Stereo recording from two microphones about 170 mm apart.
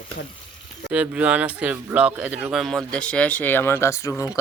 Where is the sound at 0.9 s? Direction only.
10° right (ahead or behind).